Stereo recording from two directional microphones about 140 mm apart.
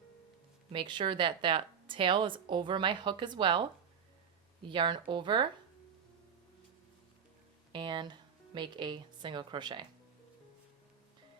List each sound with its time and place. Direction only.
0.7 s a woman's voice: 35° right (ahead or behind)
7.7 s a woman's voice: 35° right (ahead or behind)